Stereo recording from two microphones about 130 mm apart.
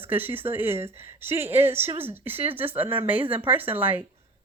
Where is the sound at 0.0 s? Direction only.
15° right (ahead or behind).